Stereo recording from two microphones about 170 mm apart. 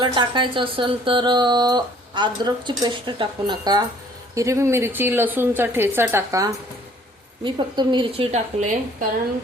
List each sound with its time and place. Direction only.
0.0 s a woman's voice: 30° right (ahead or behind); by 9.0 s 45° right (ahead or behind)